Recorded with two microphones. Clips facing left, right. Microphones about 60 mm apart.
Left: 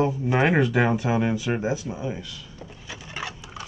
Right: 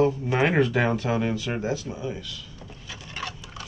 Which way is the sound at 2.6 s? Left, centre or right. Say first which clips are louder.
Left 2 dB; centre.